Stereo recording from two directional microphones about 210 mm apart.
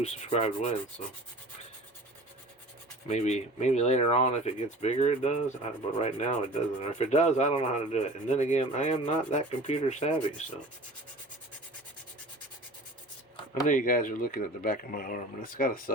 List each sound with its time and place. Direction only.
0.0 s rub: 30° left (ahead or behind)
3.1 s rub: 35° left (ahead or behind)
5.7 s sanding: 30° left (ahead or behind)
6.0 s rub: 25° left (ahead or behind)
13.7 s speech: 40° left (ahead or behind)